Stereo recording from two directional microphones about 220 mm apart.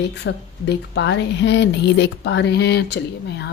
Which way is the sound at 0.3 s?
50° left (ahead or behind).